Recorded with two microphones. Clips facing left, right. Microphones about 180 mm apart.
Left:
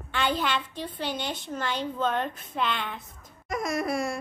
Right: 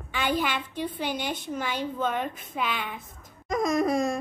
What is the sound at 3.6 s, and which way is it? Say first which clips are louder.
Speech: right 5 dB; 20° right (ahead or behind).